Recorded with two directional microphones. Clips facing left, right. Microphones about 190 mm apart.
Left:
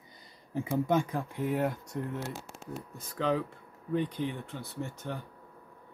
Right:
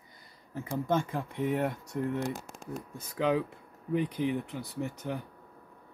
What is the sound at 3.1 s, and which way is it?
Speech, 10° right (ahead or behind).